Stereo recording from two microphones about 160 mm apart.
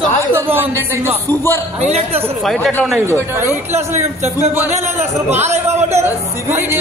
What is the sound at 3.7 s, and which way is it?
Speech, 45° right (ahead or behind).